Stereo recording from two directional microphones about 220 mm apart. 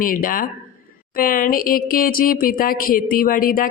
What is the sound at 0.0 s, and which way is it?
Speech, 40° left (ahead or behind).